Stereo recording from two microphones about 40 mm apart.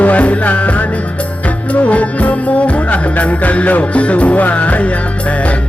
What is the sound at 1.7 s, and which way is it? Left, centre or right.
Music, left.